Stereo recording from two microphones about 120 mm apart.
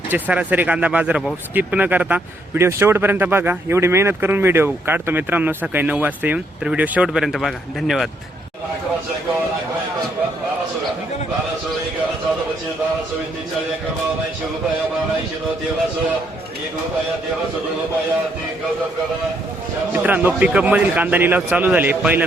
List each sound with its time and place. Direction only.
0.1 s speech: 15° right (ahead or behind)
19.9 s speech: 10° right (ahead or behind)